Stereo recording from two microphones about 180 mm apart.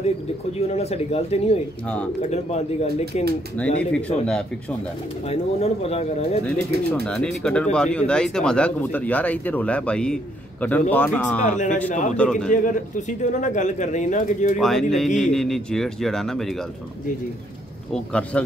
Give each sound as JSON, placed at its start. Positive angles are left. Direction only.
{"t": 0.6, "sound": "speech", "side_deg": 35}
{"t": 3.5, "sound": "speech", "side_deg": 5}
{"t": 5.3, "sound": "speech", "side_deg": 35}
{"t": 7.1, "sound": "speech", "side_deg": 5}
{"t": 11.5, "sound": "speech", "side_deg": 40}
{"t": 12.2, "sound": "speech", "side_deg": 5}
{"t": 12.4, "sound": "speech", "side_deg": 45}
{"t": 14.6, "sound": "speech", "side_deg": 0}
{"t": 17.9, "sound": "speech", "side_deg": 5}